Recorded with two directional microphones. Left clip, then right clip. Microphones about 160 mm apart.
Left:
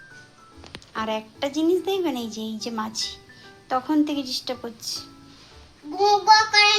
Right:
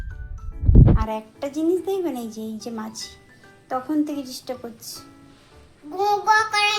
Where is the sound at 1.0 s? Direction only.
5° right (ahead or behind).